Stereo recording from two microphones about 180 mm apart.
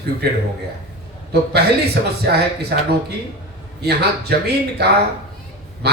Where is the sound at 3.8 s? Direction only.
65° right (ahead or behind).